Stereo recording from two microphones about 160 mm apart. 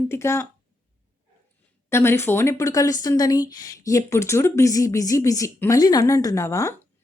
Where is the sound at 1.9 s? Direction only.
15° left (ahead or behind).